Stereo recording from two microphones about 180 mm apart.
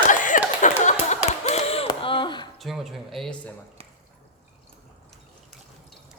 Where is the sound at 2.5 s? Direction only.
Centre (ahead or behind).